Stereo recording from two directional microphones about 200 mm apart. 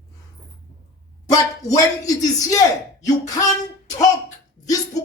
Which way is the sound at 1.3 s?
15° left (ahead or behind).